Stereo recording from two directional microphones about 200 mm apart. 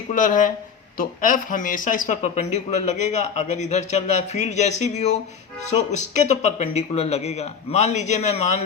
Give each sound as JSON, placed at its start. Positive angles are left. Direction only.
{"t": 0.1, "sound": "speech", "side_deg": 40}